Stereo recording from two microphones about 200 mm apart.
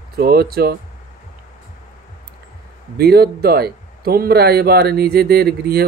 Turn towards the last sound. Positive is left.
turn(degrees=-50)  # may be behind; listen again after turning